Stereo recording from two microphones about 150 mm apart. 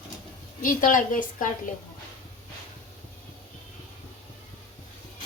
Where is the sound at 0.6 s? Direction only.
60° left (ahead or behind).